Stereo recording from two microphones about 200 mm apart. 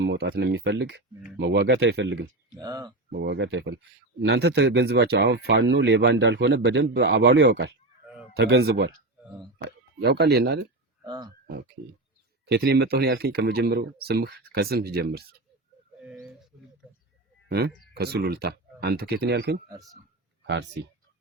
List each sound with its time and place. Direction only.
0.0 s speech: 55° right (ahead or behind)
2.6 s speech: 20° right (ahead or behind)
3.1 s speech: 55° right (ahead or behind)
10.0 s speech: 55° right (ahead or behind)
11.0 s speech: 20° right (ahead or behind)
11.4 s speech: 55° right (ahead or behind)
16.0 s bird: 5° right (ahead or behind)
17.5 s speech: 55° right (ahead or behind)